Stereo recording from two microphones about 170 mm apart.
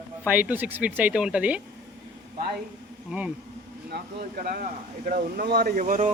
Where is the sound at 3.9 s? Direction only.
55° right (ahead or behind).